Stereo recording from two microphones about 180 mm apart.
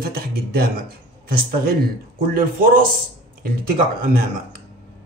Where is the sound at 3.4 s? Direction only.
55° right (ahead or behind).